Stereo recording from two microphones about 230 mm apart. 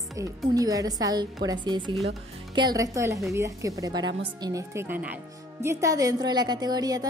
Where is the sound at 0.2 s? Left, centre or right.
Centre.